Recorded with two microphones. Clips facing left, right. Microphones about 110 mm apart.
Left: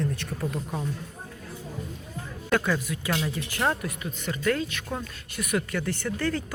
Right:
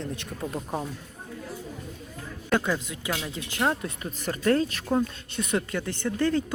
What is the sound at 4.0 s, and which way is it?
Speech, 35° right (ahead or behind).